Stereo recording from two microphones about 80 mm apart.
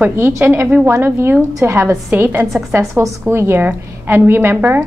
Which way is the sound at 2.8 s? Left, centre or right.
Right.